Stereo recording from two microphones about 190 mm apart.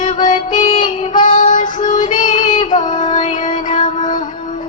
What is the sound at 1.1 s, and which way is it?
Child singing, 45° left (ahead or behind).